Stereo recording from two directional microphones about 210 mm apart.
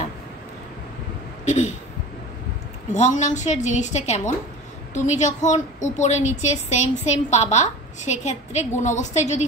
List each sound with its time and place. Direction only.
1.4 s speech: 35° left (ahead or behind)
2.9 s a woman's voice: 35° left (ahead or behind)